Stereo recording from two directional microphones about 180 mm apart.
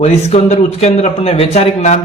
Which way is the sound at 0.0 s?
35° left (ahead or behind).